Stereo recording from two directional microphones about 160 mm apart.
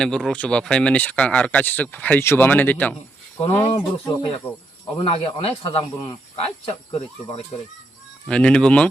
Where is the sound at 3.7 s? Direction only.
35° left (ahead or behind).